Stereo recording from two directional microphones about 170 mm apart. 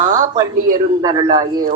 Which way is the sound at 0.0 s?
45° right (ahead or behind).